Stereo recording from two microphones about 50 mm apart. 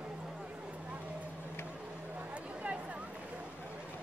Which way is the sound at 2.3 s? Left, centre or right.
Right.